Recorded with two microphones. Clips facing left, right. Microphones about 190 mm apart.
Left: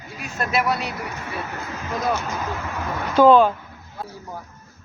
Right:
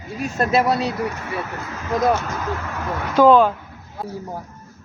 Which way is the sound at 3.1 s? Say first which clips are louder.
Even; 10° right (ahead or behind).